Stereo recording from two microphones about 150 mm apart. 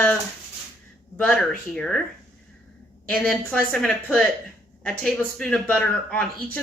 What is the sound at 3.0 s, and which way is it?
A woman's voice, 10° left (ahead or behind).